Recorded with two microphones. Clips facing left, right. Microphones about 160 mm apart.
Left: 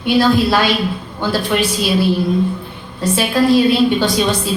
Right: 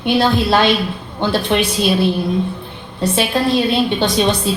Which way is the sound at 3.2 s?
25° right (ahead or behind).